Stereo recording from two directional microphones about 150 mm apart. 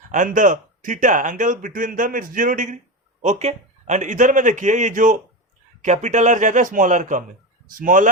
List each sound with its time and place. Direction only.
0.1 s speech: 55° right (ahead or behind)
3.2 s speech: 50° right (ahead or behind)